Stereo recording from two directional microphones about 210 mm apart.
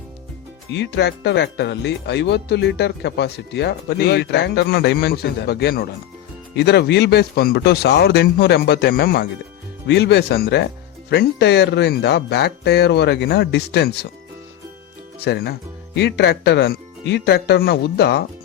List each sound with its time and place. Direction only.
0.7 s speech: 55° left (ahead or behind)
15.2 s speech: 50° left (ahead or behind)